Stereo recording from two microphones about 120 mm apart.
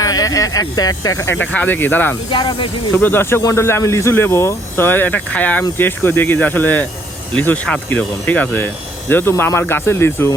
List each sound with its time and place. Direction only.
0.0 s speech: 30° left (ahead or behind); by 2.1 s 15° left (ahead or behind)
2.3 s speech: 40° left (ahead or behind)
2.9 s speech: 20° left (ahead or behind)